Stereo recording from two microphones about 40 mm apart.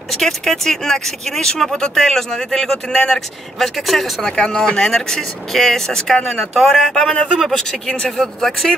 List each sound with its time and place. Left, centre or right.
0.2 s speech: centre
2.9 s speech: centre
3.5 s speech: centre